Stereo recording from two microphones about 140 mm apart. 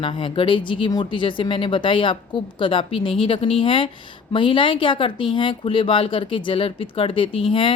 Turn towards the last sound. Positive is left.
turn(degrees=40)  # may be behind; listen again after turning